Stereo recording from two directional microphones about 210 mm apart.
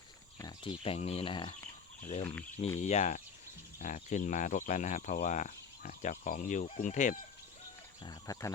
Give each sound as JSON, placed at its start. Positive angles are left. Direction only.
{"t": 0.3, "sound": "speech", "side_deg": 20}
{"t": 2.0, "sound": "speech", "side_deg": 35}
{"t": 8.0, "sound": "speech", "side_deg": 15}